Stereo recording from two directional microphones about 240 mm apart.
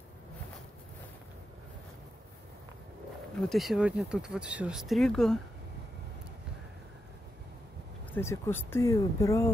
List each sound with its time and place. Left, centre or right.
3.3 s speech: centre
8.1 s speech: centre